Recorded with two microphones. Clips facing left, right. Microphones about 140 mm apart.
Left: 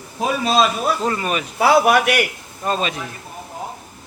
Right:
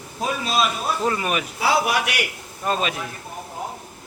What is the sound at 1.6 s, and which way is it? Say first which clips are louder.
Speech: left 8 dB; 55° left (ahead or behind).